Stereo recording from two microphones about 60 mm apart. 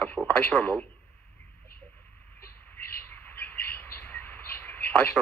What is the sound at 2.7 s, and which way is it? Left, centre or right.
Bird, left.